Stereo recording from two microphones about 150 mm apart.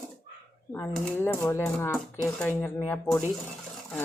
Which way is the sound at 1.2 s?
15° left (ahead or behind).